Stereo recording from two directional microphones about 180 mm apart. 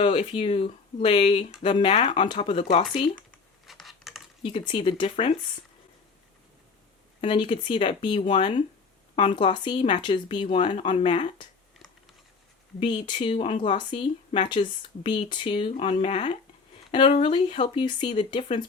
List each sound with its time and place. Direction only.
0.0 s speech: 30° left (ahead or behind)
3.7 s computer keyboard: centre (ahead or behind)
4.4 s speech: 30° left (ahead or behind)
7.2 s speech: 25° left (ahead or behind)
13.1 s speech: 30° left (ahead or behind)